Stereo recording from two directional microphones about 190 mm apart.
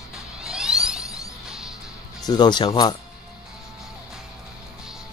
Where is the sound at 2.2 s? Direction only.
20° left (ahead or behind).